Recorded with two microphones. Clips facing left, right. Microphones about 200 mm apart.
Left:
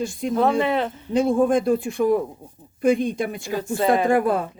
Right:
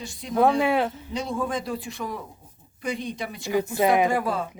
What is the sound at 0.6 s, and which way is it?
Speech, 10° right (ahead or behind).